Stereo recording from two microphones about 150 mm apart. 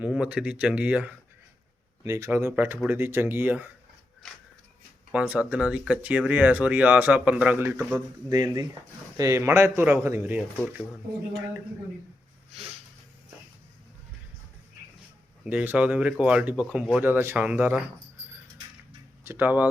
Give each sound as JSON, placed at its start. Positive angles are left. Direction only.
{"t": 0.0, "sound": "speech", "side_deg": -5}
{"t": 2.0, "sound": "speech", "side_deg": -20}
{"t": 5.1, "sound": "speech", "side_deg": -10}
{"t": 7.9, "sound": "speech", "side_deg": -25}
{"t": 15.4, "sound": "speech", "side_deg": -10}
{"t": 19.2, "sound": "speech", "side_deg": -15}